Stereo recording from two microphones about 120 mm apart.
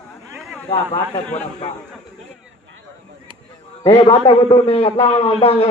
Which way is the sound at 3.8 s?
50° left (ahead or behind).